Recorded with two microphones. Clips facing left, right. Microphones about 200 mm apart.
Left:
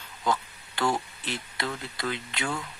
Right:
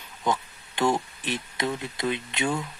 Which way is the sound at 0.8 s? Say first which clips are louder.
Right 3 dB; 20° right (ahead or behind).